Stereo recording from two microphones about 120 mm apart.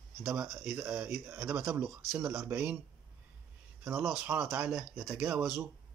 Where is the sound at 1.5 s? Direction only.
25° right (ahead or behind).